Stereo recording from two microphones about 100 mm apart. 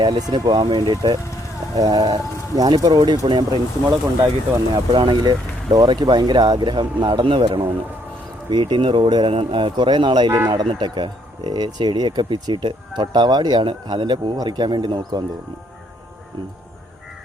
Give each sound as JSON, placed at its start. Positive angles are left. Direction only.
{"t": 0.0, "sound": "speech", "side_deg": -45}
{"t": 1.7, "sound": "speech", "side_deg": -35}
{"t": 4.9, "sound": "speech", "side_deg": -50}
{"t": 9.3, "sound": "speech", "side_deg": -65}